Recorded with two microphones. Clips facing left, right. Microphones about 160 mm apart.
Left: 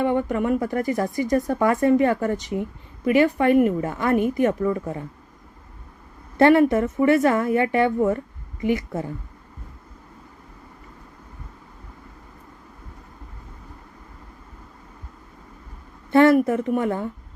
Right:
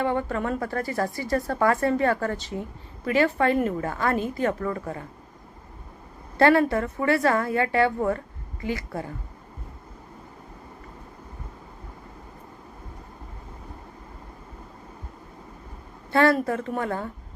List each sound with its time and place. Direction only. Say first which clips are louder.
0.0 s speech: left 4 dB; 15° left (ahead or behind)
6.3 s a woman's voice: left 4 dB; 20° left (ahead or behind)
16.1 s a woman's voice: left 5 dB; 20° left (ahead or behind)